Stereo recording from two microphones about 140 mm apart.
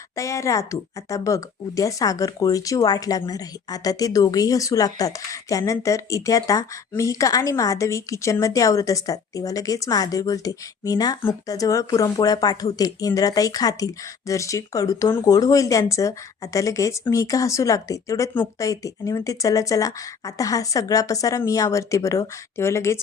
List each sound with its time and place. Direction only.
0.2 s speech: 20° left (ahead or behind)